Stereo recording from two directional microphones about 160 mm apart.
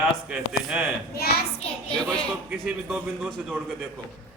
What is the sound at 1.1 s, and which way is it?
Speech, 75° left (ahead or behind).